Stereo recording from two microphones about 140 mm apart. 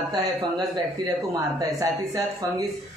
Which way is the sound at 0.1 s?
30° right (ahead or behind).